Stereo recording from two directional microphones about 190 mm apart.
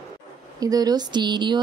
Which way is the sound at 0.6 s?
20° right (ahead or behind).